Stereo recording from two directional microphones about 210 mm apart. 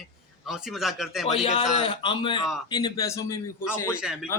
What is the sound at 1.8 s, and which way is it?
Speech, 25° left (ahead or behind).